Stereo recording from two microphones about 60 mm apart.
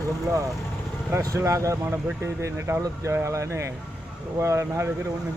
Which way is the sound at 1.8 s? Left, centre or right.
Right.